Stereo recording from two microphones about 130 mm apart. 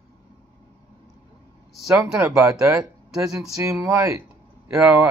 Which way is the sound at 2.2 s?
20° right (ahead or behind).